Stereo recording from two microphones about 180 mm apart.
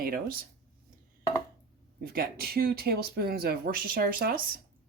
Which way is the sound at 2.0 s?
55° right (ahead or behind).